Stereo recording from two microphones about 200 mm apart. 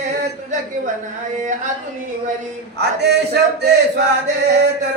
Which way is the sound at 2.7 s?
55° right (ahead or behind).